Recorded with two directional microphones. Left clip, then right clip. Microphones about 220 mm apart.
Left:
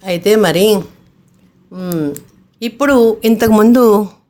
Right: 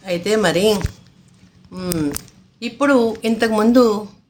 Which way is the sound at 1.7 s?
10° left (ahead or behind).